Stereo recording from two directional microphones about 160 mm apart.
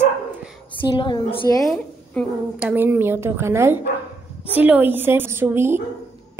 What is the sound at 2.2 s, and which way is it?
Speech, 5° left (ahead or behind).